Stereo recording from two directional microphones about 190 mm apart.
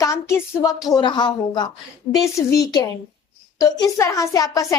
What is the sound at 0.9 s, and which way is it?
A woman's voice, 25° left (ahead or behind).